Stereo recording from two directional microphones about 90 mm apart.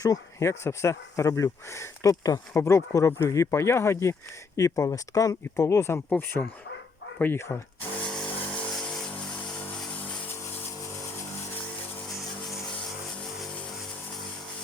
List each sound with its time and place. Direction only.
0.0 s speech: 40° left (ahead or behind)
7.2 s speech: 25° left (ahead or behind)
8.0 s vehicle: 5° left (ahead or behind)